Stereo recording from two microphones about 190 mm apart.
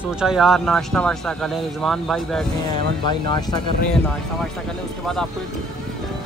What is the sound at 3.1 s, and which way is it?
Speech, 20° left (ahead or behind).